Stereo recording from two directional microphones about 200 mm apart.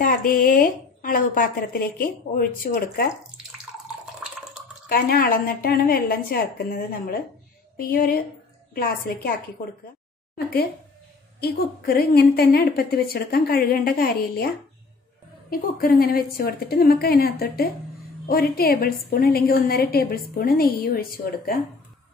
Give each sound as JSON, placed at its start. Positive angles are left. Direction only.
{"t": 0.0, "sound": "a woman's voice", "side_deg": 45}
{"t": 4.8, "sound": "a woman's voice", "side_deg": 50}
{"t": 10.3, "sound": "a woman's voice", "side_deg": 50}
{"t": 15.5, "sound": "a woman's voice", "side_deg": 45}